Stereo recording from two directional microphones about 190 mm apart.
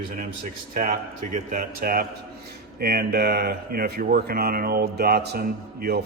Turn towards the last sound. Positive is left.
turn(degrees=-55)  # may be behind; listen again after turning